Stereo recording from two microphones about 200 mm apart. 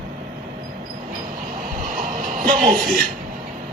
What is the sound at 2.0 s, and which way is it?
Vehicle, 45° right (ahead or behind).